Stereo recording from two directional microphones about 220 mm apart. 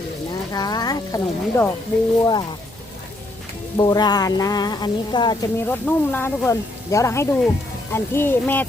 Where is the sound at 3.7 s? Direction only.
20° left (ahead or behind).